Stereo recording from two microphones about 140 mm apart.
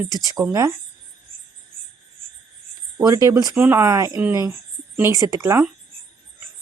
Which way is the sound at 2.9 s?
25° right (ahead or behind).